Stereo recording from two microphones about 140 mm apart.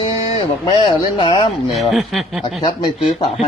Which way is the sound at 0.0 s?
35° left (ahead or behind).